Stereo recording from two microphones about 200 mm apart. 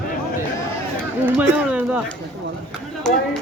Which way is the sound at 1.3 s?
5° right (ahead or behind).